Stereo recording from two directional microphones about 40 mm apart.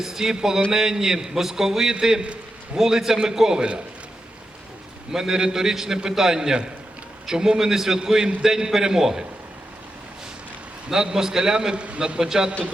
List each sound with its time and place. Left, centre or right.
0.0 s a man's voice: centre
5.1 s a man's voice: centre
10.8 s a man's voice: centre